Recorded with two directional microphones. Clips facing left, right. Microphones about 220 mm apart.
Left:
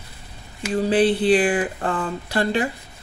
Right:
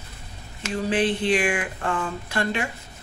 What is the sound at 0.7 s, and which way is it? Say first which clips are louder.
Speech: left 5 dB; 35° left (ahead or behind).